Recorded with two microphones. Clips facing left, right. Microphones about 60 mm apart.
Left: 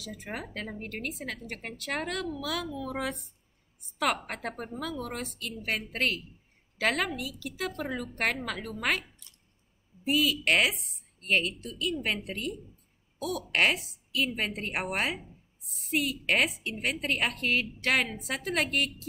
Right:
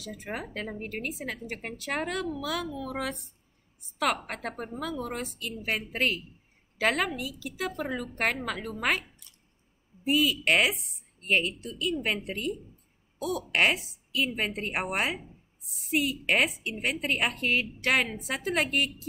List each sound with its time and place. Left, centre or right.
0.0 s a woman's voice: centre